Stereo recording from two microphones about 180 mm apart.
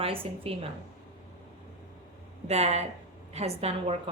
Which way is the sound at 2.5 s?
35° right (ahead or behind).